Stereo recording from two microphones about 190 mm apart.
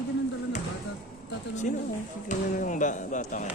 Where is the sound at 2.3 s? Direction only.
45° left (ahead or behind).